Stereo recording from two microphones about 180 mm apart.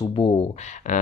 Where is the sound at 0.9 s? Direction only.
40° left (ahead or behind).